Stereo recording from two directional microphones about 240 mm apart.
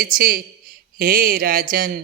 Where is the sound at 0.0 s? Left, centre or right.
Right.